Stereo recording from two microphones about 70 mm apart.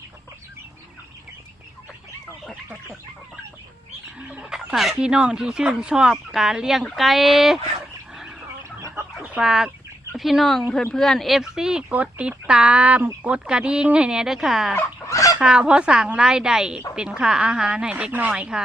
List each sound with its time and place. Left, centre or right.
4.2 s fowl: centre
4.9 s speech: centre
9.4 s speech: centre
11.9 s speech: right; by 14.8 s centre
14.8 s fowl: left
15.4 s speech: centre
17.9 s speech: right